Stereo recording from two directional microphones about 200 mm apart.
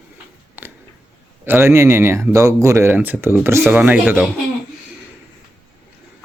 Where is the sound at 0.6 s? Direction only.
10° right (ahead or behind).